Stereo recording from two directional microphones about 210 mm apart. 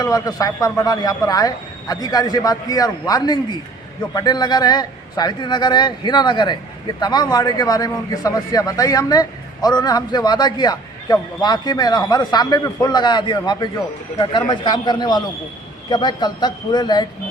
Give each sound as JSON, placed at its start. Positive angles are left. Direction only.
{"t": 0.0, "sound": "a man's voice", "side_deg": 15}